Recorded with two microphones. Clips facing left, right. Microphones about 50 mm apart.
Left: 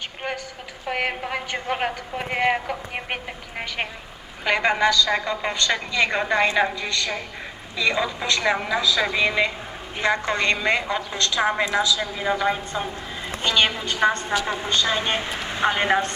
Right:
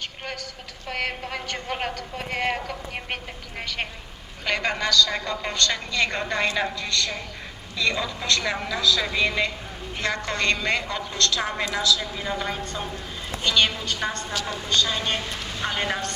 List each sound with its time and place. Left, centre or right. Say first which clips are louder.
0.9 s a woman's voice: left 4 dB; centre
4.4 s a woman's voice: left 5 dB; centre